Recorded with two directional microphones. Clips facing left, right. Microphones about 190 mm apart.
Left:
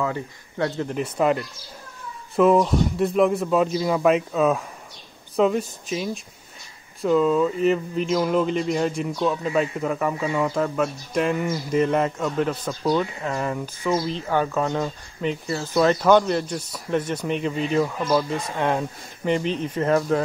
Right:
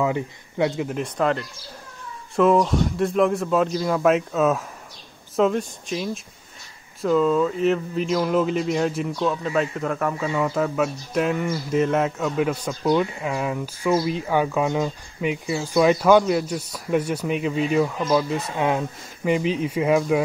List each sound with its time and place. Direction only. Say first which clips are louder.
0.0 s speech: right 3 dB; 15° right (ahead or behind)
0.9 s speech: left 1 dB; 5° left (ahead or behind)